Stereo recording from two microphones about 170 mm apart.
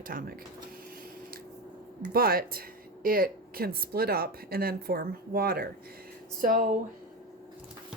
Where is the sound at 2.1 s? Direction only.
65° right (ahead or behind).